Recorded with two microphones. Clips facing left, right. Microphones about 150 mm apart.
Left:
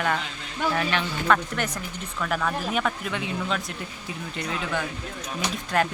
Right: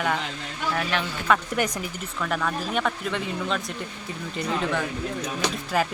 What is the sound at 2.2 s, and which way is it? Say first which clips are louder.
Speech: even; centre (ahead or behind).